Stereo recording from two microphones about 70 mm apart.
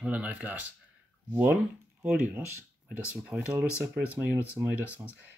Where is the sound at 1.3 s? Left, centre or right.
Right.